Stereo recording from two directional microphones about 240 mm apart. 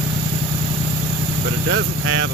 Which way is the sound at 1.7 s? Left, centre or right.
Right.